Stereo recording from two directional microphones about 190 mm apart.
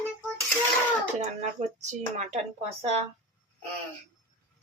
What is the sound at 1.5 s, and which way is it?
Speech, 35° right (ahead or behind).